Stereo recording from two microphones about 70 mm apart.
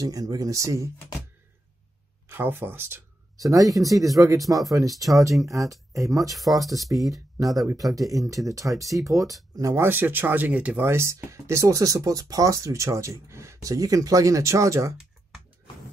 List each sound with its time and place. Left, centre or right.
0.0 s speech: right
2.2 s speech: right
3.3 s speech: right
9.8 s speech: right
10.8 s speech: right